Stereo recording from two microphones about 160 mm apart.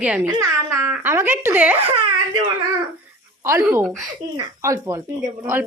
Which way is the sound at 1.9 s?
30° right (ahead or behind).